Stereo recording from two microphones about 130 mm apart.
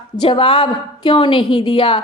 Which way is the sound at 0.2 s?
45° left (ahead or behind).